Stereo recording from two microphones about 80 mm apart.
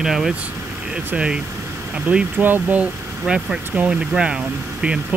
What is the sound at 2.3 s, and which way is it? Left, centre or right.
Speech, right.